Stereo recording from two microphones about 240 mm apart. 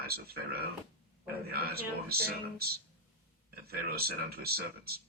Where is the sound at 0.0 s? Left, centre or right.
Right.